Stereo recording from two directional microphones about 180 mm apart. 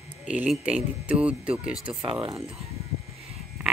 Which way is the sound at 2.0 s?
30° right (ahead or behind).